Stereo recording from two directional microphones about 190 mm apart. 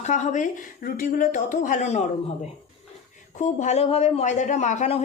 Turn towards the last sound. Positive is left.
turn(degrees=40)  # may be behind; listen again after turning